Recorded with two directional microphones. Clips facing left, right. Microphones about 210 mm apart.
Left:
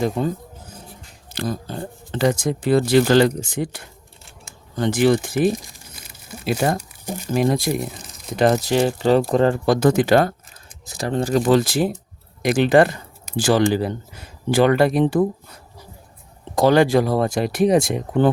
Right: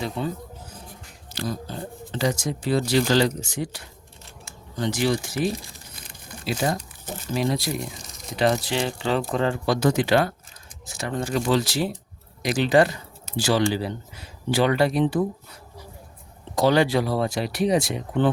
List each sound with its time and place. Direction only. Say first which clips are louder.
0.0 s speech: left 6 dB; 45° left (ahead or behind)
7.0 s speech: left 6 dB; 15° left (ahead or behind)
7.3 s speech: left 5 dB; 50° left (ahead or behind)
10.8 s speech: left 6 dB; 35° left (ahead or behind)
11.4 s speech: left 5 dB; 50° left (ahead or behind)
16.6 s speech: left 5 dB; 50° left (ahead or behind)